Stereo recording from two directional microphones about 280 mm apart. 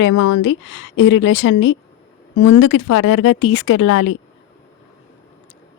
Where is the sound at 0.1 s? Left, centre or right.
Left.